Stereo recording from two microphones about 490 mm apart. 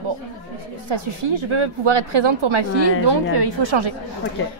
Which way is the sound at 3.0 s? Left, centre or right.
Right.